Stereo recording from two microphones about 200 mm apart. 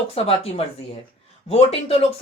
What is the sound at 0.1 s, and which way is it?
Speech, 30° left (ahead or behind).